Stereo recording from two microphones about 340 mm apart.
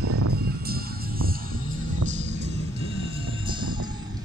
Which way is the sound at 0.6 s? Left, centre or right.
Right.